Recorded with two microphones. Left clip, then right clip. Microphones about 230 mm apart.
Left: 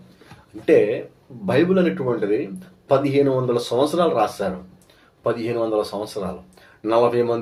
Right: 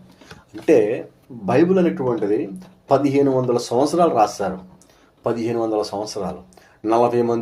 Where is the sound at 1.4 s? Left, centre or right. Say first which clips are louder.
Right 2 dB; right.